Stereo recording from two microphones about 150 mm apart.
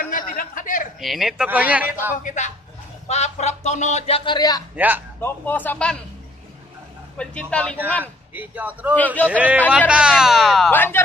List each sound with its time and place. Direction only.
0.0 s a sound: 70° left (ahead or behind)
0.9 s speech: centre (ahead or behind)
2.2 s speech: 55° left (ahead or behind); by 4.6 s 25° left (ahead or behind)
4.7 s speech: 10° right (ahead or behind)
5.2 s a man's voice: 10° left (ahead or behind)
7.2 s a man's voice: 5° left (ahead or behind)
8.0 s speech: 10° right (ahead or behind)
8.9 s a man's voice: 10° left (ahead or behind)
9.3 s speech: 10° right (ahead or behind)
10.7 s a man's voice: 15° left (ahead or behind)